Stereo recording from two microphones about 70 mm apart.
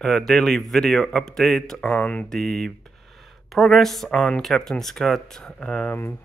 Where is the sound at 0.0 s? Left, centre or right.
Centre.